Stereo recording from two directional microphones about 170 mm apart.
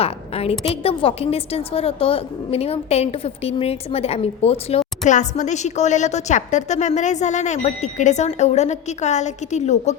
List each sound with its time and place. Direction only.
0.0 s a woman's voice: 35° left (ahead or behind)